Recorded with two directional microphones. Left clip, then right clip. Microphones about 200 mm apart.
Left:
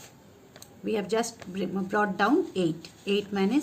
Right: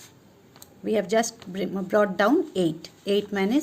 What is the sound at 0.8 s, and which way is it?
Speech, 40° right (ahead or behind).